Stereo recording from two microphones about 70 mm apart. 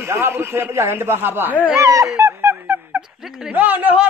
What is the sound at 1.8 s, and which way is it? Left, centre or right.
Speech, right.